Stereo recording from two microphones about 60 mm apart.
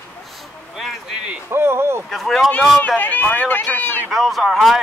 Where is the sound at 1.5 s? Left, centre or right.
Right.